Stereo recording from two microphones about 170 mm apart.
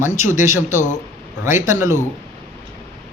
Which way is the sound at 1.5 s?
15° right (ahead or behind).